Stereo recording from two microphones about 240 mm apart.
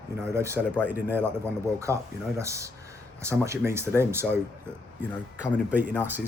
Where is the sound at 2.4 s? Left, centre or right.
Centre.